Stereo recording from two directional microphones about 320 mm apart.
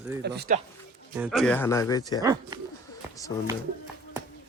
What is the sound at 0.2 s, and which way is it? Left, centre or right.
Speech, right.